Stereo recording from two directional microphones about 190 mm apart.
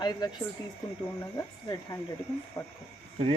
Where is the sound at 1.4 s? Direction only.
15° left (ahead or behind).